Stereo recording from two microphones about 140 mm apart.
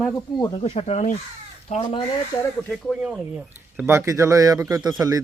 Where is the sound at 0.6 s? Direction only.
40° left (ahead or behind).